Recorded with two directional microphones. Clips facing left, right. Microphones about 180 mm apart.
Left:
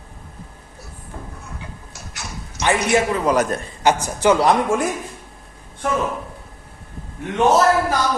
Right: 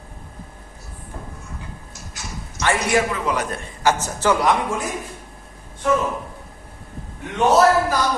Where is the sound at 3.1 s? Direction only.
40° left (ahead or behind).